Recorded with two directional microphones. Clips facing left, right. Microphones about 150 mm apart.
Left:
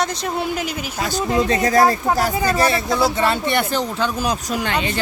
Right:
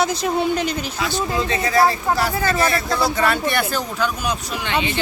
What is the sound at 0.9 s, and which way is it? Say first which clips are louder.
Speech: left 6 dB; 45° left (ahead or behind).